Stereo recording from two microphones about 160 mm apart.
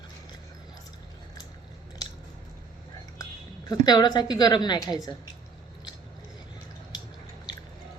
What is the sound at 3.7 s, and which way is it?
A woman's voice, 25° left (ahead or behind).